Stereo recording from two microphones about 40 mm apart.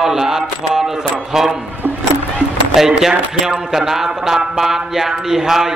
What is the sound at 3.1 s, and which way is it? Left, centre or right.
Speech, centre.